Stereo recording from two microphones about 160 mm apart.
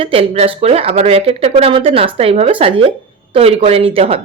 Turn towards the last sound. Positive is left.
turn(degrees=-35)  # may be behind; listen again after turning